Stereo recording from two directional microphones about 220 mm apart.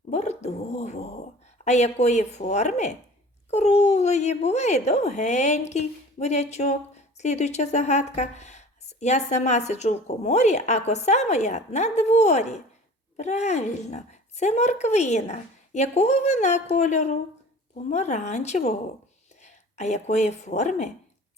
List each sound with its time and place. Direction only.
0.1 s speech: 30° left (ahead or behind)